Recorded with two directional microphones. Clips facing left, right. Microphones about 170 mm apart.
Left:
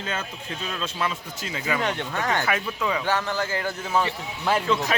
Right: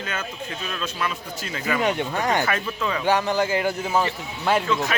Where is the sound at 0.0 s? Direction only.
25° left (ahead or behind).